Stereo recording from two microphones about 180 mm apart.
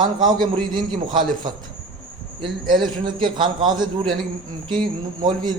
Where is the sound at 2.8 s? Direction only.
25° right (ahead or behind).